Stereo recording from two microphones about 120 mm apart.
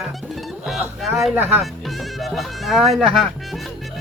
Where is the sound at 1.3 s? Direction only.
15° right (ahead or behind).